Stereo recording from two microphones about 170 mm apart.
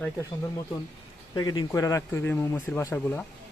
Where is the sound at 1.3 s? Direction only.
25° left (ahead or behind).